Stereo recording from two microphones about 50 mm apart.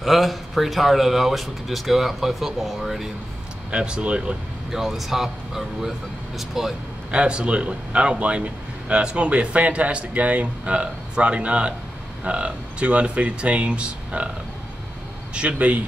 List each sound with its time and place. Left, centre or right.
0.0 s speech: centre
3.7 s a man's voice: centre
4.7 s speech: centre
7.1 s a man's voice: right
15.3 s a man's voice: right